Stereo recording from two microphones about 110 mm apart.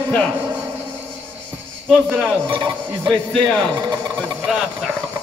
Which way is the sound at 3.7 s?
40° right (ahead or behind).